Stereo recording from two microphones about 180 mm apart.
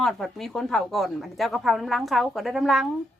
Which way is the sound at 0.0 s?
Centre (ahead or behind).